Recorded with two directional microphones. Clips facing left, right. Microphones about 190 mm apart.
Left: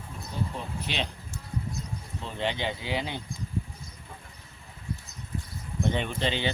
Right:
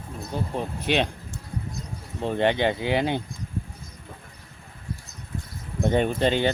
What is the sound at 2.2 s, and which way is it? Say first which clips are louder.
Speech: right 9 dB; 55° right (ahead or behind).